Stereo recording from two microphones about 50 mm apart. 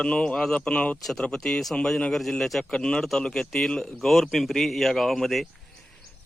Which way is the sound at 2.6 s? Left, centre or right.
Centre.